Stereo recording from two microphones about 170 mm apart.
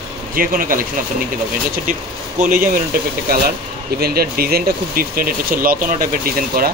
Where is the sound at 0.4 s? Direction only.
55° right (ahead or behind).